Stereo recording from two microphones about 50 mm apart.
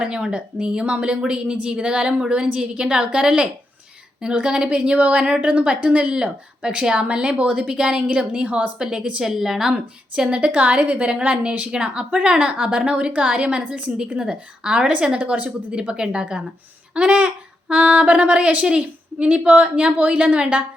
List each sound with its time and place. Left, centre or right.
0.0 s a woman's voice: centre
4.8 s a woman's voice: right
8.8 s a woman's voice: centre
9.2 s a woman's voice: centre
9.7 s a woman's voice: right